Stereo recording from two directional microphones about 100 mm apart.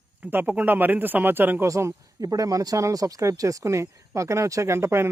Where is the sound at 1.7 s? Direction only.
30° right (ahead or behind).